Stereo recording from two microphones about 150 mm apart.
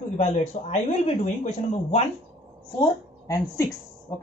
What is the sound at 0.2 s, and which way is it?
Speech, 50° left (ahead or behind).